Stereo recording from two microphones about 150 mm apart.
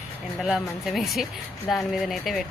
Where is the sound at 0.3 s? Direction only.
Centre (ahead or behind).